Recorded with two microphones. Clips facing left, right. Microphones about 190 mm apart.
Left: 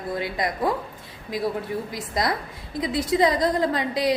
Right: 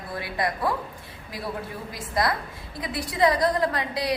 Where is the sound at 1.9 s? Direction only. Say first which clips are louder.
Right 3 dB; 20° left (ahead or behind).